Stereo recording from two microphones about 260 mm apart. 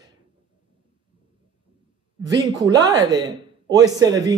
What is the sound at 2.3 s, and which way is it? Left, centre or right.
A man's voice, centre.